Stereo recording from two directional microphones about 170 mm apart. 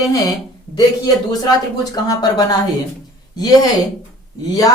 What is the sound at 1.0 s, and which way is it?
Speech, 20° left (ahead or behind).